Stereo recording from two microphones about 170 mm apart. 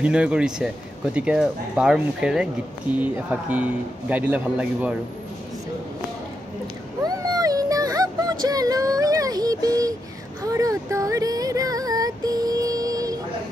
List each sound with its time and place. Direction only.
0.0 s speech: 5° right (ahead or behind)
7.0 s music: 20° right (ahead or behind)
10.4 s a sound: 20° right (ahead or behind)